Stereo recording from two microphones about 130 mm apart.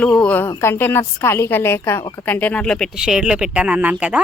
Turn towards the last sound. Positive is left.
turn(degrees=-10)  # may be behind; listen again after turning